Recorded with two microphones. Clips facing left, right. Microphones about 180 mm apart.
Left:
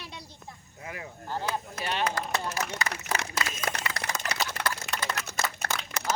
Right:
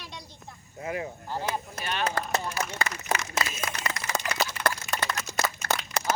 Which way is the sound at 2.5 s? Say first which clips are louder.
Right 1 dB; 70° left (ahead or behind).